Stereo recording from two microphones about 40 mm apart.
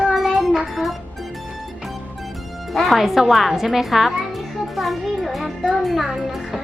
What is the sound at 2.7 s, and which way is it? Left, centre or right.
A child's voice, centre.